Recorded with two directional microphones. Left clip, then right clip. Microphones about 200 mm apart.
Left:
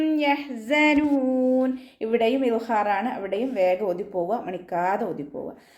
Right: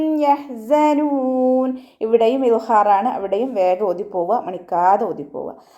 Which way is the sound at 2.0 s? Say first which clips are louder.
Right 7 dB; 20° right (ahead or behind).